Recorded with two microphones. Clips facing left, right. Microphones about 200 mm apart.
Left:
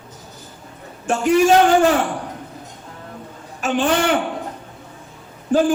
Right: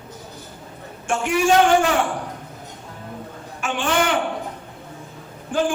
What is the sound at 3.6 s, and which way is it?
Speech, 40° left (ahead or behind).